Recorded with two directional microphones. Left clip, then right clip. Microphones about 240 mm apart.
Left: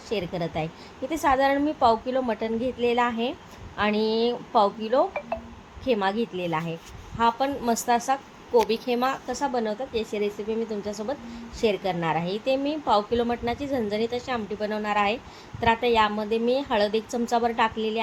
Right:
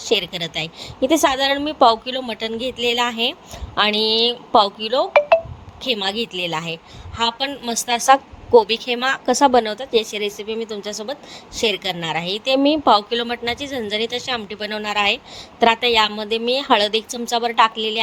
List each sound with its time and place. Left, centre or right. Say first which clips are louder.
0.0 s a woman's voice: right 8 dB; right